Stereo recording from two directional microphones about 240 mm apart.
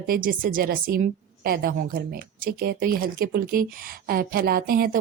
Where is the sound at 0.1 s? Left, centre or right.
Right.